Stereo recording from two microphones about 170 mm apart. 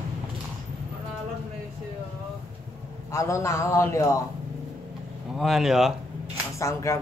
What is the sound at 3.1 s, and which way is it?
A man's voice, 15° left (ahead or behind).